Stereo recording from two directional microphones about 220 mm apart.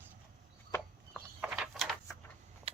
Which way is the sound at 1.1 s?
5° right (ahead or behind).